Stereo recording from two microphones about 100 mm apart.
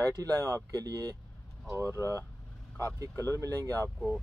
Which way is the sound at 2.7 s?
30° right (ahead or behind).